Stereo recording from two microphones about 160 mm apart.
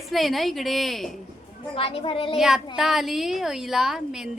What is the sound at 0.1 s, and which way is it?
A child's voice, centre (ahead or behind).